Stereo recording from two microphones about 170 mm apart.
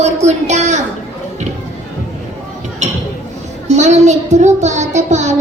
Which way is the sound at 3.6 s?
40° right (ahead or behind).